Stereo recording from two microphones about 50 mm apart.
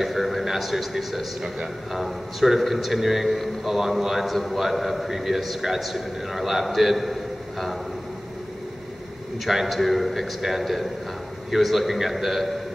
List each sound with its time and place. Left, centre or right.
0.0 s a man's voice: centre
9.4 s a man's voice: centre